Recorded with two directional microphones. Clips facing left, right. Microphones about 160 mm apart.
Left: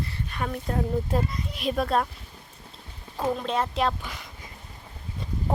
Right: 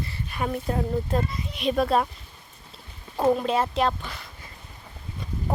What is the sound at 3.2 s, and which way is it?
Speech, 10° right (ahead or behind).